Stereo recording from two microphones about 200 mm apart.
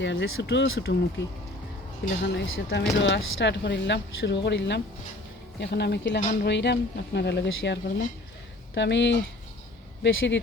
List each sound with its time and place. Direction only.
0.0 s speech: 60° left (ahead or behind)
2.2 s speech: 55° left (ahead or behind)